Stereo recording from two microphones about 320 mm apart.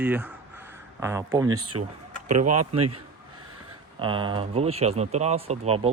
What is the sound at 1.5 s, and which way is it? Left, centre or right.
Speech, right.